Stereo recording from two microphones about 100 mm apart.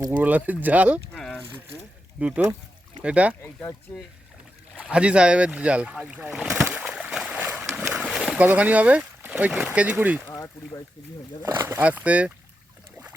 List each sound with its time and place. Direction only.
0.2 s speech: 15° right (ahead or behind)
1.1 s a sound: 15° left (ahead or behind)
2.1 s speech: 15° right (ahead or behind)
4.9 s speech: 10° right (ahead or behind)
6.7 s boat: 15° right (ahead or behind)
7.7 s a sound: 20° right (ahead or behind)
7.9 s boat: 5° right (ahead or behind)
8.4 s speech: 15° right (ahead or behind)
10.2 s speech: 25° left (ahead or behind)
11.8 s speech: 15° right (ahead or behind)